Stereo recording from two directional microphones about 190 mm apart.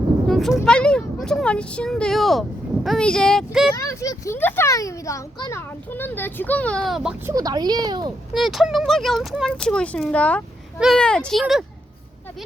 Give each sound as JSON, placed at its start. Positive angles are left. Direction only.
{"t": 0.3, "sound": "speech", "side_deg": 0}
{"t": 3.8, "sound": "a child's voice", "side_deg": 15}
{"t": 7.3, "sound": "speech", "side_deg": -20}
{"t": 8.3, "sound": "speech", "side_deg": 0}